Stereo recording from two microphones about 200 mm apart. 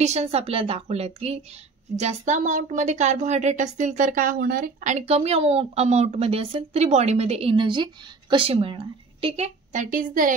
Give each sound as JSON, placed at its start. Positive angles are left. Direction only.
{"t": 0.0, "sound": "speech", "side_deg": -35}